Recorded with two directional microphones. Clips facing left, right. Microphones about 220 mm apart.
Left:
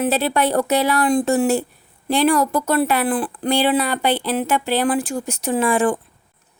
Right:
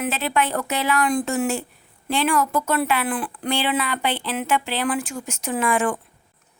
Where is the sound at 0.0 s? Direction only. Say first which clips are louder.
Left 5 dB; 35° left (ahead or behind).